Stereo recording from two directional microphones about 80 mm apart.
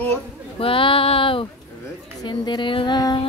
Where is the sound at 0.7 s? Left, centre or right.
Left.